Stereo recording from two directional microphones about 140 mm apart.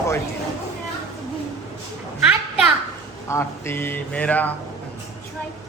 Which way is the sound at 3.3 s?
20° left (ahead or behind).